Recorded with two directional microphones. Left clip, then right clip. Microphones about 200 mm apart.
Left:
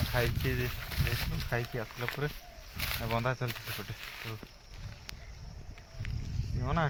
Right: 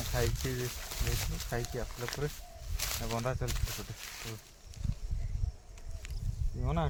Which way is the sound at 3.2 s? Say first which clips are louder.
Left 3 dB; 20° left (ahead or behind).